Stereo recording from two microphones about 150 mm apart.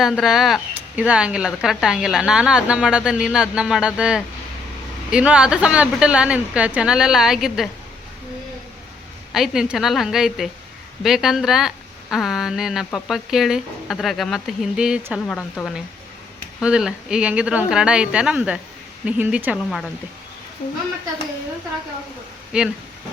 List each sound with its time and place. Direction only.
0.0 s speech: centre (ahead or behind)
9.3 s speech: 5° right (ahead or behind)
22.5 s speech: 5° right (ahead or behind)